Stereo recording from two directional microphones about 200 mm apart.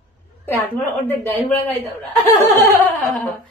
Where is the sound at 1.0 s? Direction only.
10° left (ahead or behind).